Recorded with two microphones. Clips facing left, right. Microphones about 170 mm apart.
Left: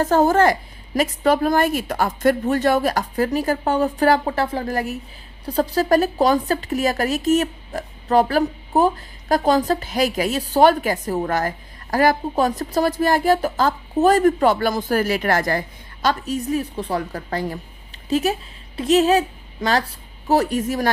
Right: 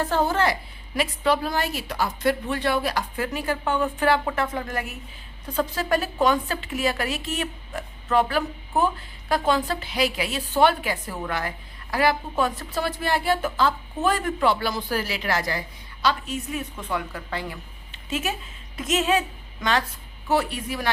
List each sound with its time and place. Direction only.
0.0 s a woman's voice: 45° left (ahead or behind)